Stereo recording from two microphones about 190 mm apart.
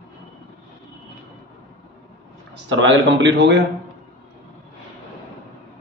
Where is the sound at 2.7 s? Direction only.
75° right (ahead or behind).